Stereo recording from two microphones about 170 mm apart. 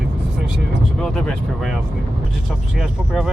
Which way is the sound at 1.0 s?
5° left (ahead or behind).